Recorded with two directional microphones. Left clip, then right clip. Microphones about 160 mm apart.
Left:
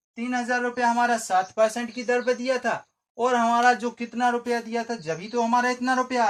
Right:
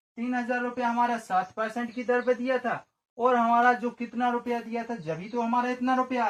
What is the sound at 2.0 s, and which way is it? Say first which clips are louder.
Speech: left 2 dB; 40° left (ahead or behind).